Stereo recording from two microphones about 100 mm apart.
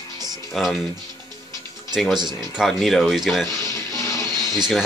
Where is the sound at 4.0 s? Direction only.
35° left (ahead or behind).